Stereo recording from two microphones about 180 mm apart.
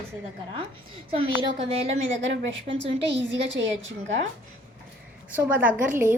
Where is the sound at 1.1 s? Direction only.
30° right (ahead or behind).